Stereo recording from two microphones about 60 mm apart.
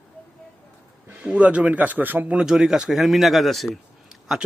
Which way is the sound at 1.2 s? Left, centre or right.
Right.